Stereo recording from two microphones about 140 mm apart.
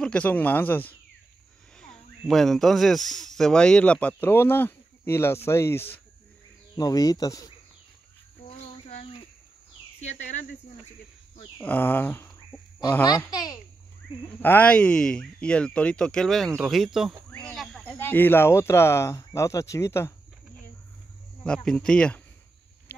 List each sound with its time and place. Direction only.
0.0 s speech: 10° left (ahead or behind); by 7.5 s 25° left (ahead or behind)
8.5 s a sound: 50° left (ahead or behind)
9.9 s speech: 50° left (ahead or behind)
11.5 s speech: 15° left (ahead or behind)
13.3 s a child's voice: 25° left (ahead or behind)
14.4 s speech: 10° left (ahead or behind)
17.3 s a sound: 5° left (ahead or behind)
17.8 s speech: 15° left (ahead or behind)
21.6 s speech: 5° left (ahead or behind)